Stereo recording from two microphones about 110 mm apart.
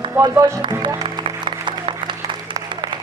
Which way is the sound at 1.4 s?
45° right (ahead or behind).